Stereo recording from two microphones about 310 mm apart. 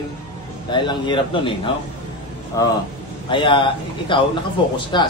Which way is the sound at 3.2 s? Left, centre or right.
Centre.